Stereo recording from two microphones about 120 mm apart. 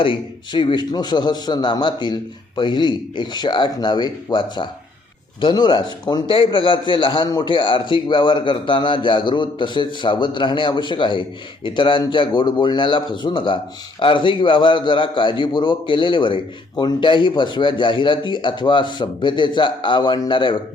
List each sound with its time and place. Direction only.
0.0 s a man's voice: 45° left (ahead or behind)
6.3 s a man's voice: 45° left (ahead or behind)